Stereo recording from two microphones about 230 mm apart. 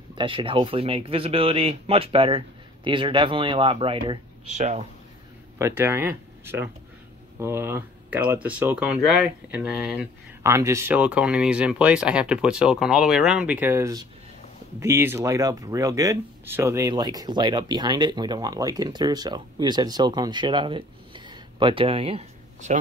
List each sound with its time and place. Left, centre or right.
0.1 s speech: right
5.6 s speech: centre; by 22.8 s right